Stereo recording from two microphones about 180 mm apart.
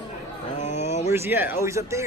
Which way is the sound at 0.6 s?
40° left (ahead or behind).